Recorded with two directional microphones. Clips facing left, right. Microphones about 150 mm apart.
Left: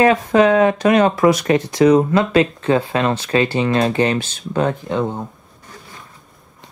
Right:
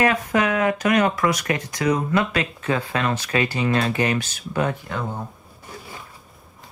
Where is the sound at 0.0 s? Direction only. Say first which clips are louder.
Left 7 dB; 25° left (ahead or behind).